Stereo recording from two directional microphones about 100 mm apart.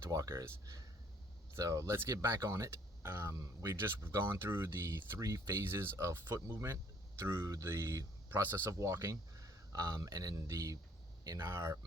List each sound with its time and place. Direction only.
0.0 s speech: 30° right (ahead or behind)